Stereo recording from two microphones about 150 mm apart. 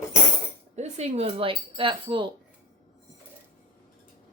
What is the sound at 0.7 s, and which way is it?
Speech, 45° right (ahead or behind).